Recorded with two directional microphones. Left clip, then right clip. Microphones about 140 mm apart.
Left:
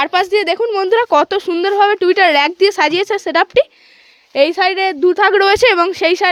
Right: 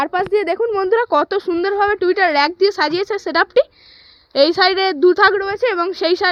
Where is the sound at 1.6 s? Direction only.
40° left (ahead or behind).